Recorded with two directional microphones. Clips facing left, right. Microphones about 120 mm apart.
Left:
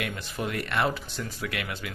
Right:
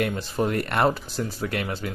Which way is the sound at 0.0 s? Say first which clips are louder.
Right 8 dB; 35° right (ahead or behind).